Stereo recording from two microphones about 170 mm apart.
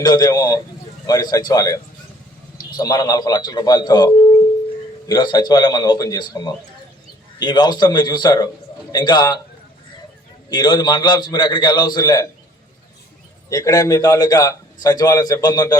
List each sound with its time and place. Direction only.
0.0 s a man's voice: 25° left (ahead or behind)
10.5 s a man's voice: 25° left (ahead or behind)
13.5 s a man's voice: 20° left (ahead or behind)